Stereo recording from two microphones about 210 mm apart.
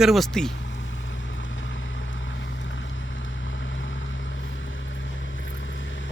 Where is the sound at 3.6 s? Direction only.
65° left (ahead or behind).